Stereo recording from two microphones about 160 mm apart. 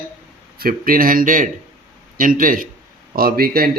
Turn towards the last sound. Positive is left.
turn(degrees=-70)  # may be behind; listen again after turning